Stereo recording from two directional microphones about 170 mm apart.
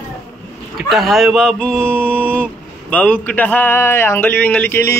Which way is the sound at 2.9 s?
10° left (ahead or behind).